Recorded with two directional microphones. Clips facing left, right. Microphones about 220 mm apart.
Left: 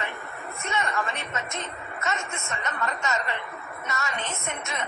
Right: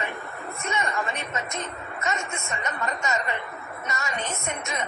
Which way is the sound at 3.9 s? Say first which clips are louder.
Even; 15° right (ahead or behind).